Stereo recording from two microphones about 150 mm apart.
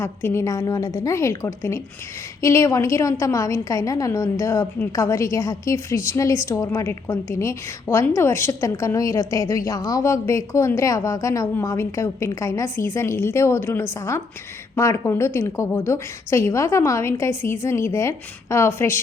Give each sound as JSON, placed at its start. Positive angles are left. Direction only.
{"t": 0.0, "sound": "a woman's voice", "side_deg": 15}